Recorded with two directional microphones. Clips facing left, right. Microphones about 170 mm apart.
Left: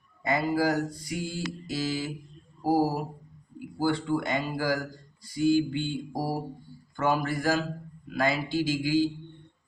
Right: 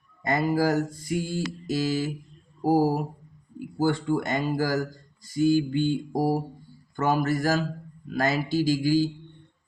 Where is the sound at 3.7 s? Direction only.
45° right (ahead or behind).